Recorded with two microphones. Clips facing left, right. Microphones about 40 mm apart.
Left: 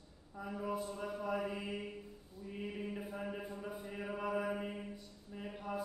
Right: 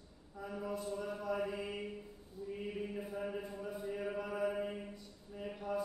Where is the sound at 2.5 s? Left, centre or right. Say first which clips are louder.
Right 1 dB; centre.